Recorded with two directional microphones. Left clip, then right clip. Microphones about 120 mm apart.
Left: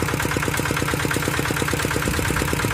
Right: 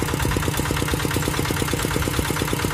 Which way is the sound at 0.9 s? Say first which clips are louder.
Left 2 dB; 15° right (ahead or behind).